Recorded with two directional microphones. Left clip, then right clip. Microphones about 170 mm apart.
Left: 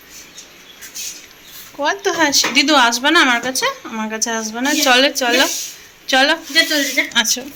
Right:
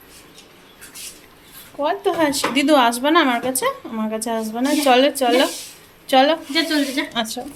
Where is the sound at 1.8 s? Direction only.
10° right (ahead or behind).